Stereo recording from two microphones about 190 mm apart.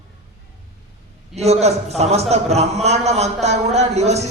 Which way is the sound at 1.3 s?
35° right (ahead or behind).